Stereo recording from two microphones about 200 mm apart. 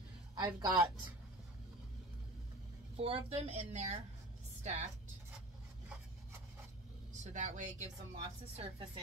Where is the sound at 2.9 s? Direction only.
30° right (ahead or behind).